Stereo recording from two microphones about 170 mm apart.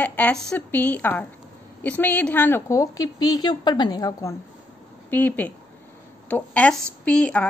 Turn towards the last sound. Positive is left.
turn(degrees=5)  # may be behind; listen again after turning